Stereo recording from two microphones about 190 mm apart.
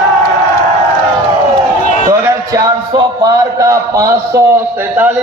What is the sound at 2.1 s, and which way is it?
A man's voice, 15° right (ahead or behind).